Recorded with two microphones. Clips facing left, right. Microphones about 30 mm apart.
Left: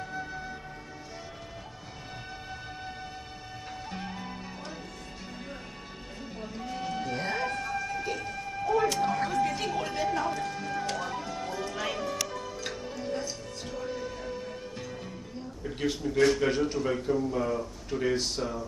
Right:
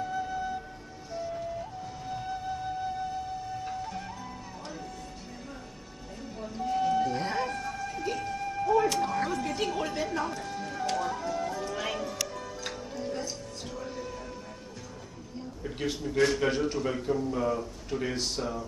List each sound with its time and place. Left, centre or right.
2.0 s music: left
6.2 s a sound: left
6.6 s music: centre
7.2 s howl: centre
7.6 s music: centre
8.8 s a sound: centre
11.0 s music: left
12.2 s music: centre
15.6 s a man's voice: centre